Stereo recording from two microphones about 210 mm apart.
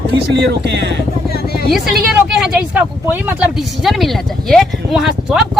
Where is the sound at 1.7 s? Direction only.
Centre (ahead or behind).